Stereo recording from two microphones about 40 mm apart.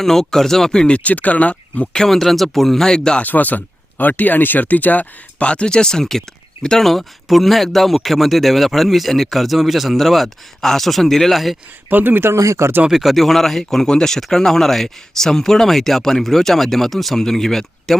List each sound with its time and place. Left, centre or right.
0.0 s speech: centre
0.7 s speech: left
0.9 s speech: left
2.0 s speech: centre
3.2 s speech: left
5.4 s speech: left
6.8 s speech: centre
11.9 s speech: right
12.9 s speech: centre